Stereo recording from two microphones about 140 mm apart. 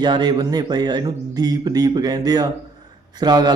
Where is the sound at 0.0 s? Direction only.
30° right (ahead or behind).